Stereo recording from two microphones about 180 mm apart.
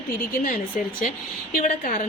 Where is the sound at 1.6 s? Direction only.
50° left (ahead or behind).